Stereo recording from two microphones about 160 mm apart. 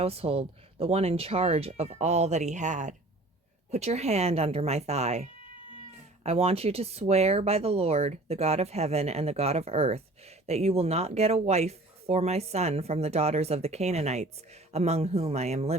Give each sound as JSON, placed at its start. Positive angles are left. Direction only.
{"t": 0.0, "sound": "speech", "side_deg": -40}